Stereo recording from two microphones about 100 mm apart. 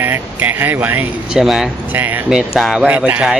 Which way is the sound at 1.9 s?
15° right (ahead or behind).